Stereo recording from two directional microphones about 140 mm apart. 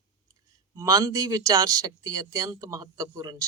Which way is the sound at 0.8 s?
25° right (ahead or behind).